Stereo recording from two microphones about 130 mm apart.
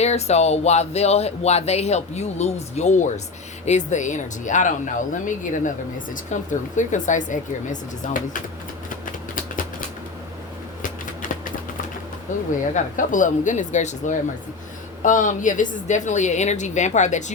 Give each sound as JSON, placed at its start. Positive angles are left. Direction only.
{"t": 0.0, "sound": "speech", "side_deg": 55}
{"t": 6.5, "sound": "speech", "side_deg": 70}
{"t": 12.3, "sound": "speech", "side_deg": 80}
{"t": 15.0, "sound": "speech", "side_deg": 80}
{"t": 15.9, "sound": "speech", "side_deg": 65}